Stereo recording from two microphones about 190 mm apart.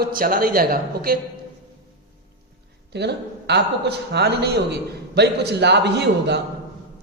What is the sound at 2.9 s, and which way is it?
A man's voice, 60° right (ahead or behind).